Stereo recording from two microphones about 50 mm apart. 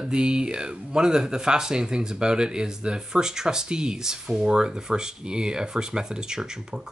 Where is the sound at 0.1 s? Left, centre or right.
Centre.